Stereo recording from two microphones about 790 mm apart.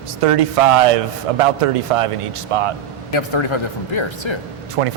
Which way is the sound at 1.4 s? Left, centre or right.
Right.